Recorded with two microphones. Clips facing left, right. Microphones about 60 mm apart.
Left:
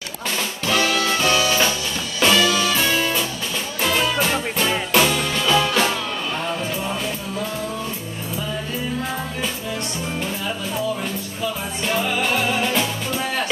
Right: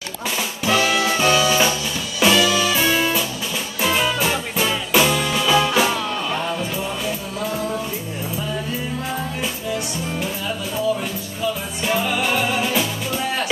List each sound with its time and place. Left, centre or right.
0.7 s music: centre
11.8 s music: centre